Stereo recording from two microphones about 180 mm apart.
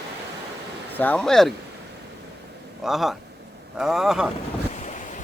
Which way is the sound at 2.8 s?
Centre (ahead or behind).